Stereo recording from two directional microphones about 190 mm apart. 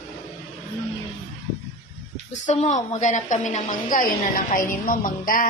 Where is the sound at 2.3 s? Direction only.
40° left (ahead or behind).